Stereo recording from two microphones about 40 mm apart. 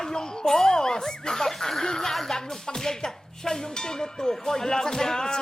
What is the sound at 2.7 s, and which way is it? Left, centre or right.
Speech, centre.